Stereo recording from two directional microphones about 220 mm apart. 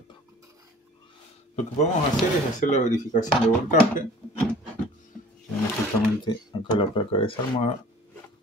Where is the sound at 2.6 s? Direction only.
35° left (ahead or behind).